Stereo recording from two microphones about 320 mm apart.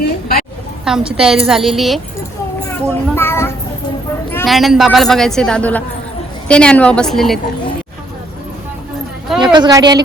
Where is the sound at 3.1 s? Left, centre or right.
Centre.